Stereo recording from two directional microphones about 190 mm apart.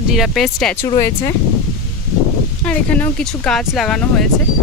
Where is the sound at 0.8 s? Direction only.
20° left (ahead or behind).